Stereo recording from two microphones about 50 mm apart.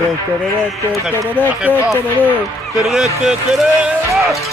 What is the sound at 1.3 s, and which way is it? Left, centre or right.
Speech, left.